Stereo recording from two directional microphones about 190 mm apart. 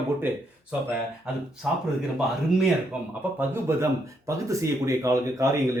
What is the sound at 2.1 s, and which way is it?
A man's voice, centre (ahead or behind).